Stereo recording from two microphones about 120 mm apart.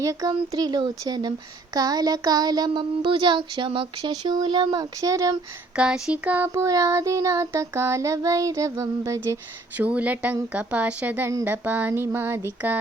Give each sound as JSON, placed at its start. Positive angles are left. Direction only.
{"t": 0.0, "sound": "speech", "side_deg": -30}
{"t": 5.7, "sound": "child singing", "side_deg": -5}
{"t": 9.7, "sound": "speech", "side_deg": -15}